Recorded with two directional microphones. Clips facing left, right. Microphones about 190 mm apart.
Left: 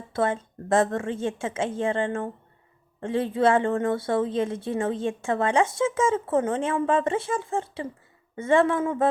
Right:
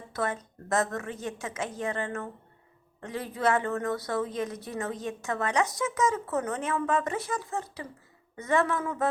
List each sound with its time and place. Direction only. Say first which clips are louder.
0.1 s a woman's voice: left 6 dB; 25° left (ahead or behind)